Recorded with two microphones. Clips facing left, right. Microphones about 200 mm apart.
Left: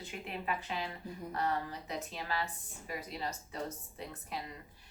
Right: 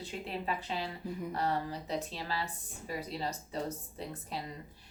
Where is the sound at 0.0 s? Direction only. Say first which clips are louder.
Right 3 dB; 30° right (ahead or behind).